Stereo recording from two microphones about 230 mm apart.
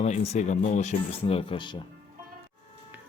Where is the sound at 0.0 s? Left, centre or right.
Left.